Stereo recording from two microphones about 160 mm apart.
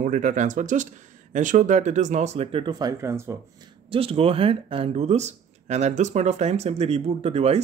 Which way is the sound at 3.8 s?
35° right (ahead or behind).